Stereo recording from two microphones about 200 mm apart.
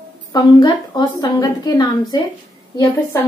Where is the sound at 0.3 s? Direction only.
20° left (ahead or behind).